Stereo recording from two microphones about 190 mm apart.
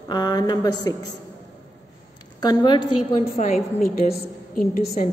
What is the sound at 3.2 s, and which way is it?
Speech, 35° left (ahead or behind).